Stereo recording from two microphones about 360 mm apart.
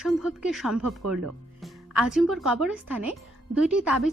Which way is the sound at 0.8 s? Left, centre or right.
Right.